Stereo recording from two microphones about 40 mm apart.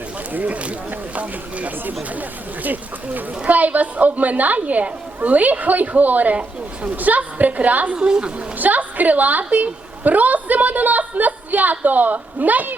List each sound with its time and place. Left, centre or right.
0.3 s a woman's voice: right
7.9 s a woman's voice: right
8.5 s a woman's voice: right